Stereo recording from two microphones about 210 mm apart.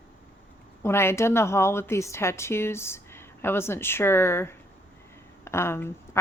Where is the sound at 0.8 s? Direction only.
10° left (ahead or behind).